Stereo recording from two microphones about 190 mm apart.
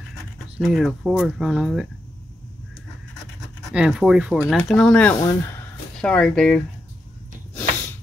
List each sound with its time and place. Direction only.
0.1 s speech: centre (ahead or behind)
3.3 s speech: centre (ahead or behind)
5.2 s speech: 15° left (ahead or behind)
5.9 s speech: 5° left (ahead or behind)